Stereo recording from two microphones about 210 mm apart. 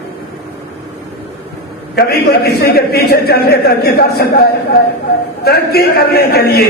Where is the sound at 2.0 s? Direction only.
50° left (ahead or behind).